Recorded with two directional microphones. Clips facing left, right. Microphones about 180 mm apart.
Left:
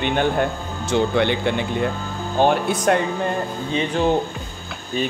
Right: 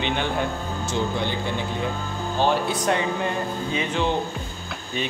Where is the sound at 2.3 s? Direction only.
55° left (ahead or behind).